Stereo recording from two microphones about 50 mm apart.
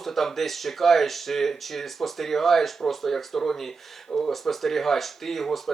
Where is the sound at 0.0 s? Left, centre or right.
Centre.